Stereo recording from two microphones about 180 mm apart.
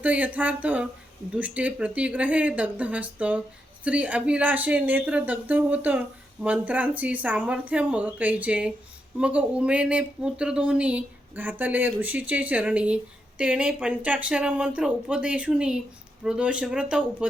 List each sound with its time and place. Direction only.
0.0 s speech: 10° right (ahead or behind)